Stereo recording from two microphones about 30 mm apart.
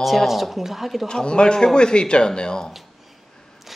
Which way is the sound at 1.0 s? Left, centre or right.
Left.